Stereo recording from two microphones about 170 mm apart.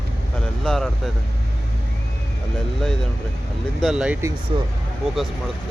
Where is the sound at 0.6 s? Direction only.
5° left (ahead or behind).